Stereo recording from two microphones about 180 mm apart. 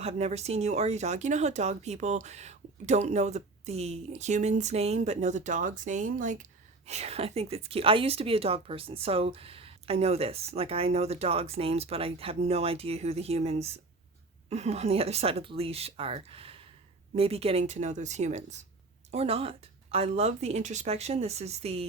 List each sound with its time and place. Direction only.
0.0 s a woman's voice: 35° right (ahead or behind)